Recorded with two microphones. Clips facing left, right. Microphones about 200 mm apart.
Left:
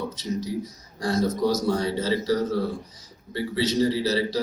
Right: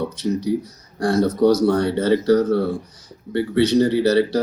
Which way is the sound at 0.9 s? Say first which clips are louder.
Right 6 dB; 70° right (ahead or behind).